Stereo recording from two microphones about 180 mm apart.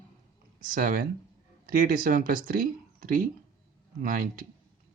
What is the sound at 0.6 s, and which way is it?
Speech, 50° right (ahead or behind).